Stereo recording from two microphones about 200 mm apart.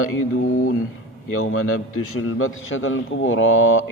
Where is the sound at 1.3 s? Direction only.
90° left.